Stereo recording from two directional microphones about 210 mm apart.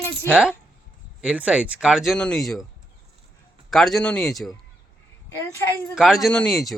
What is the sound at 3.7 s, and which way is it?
Speech, centre (ahead or behind).